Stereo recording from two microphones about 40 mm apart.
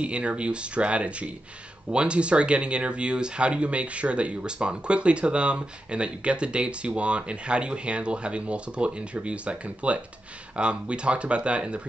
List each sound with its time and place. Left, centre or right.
0.0 s speech: right